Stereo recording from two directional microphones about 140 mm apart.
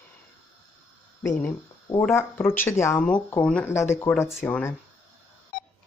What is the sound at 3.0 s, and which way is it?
Speech, 10° left (ahead or behind).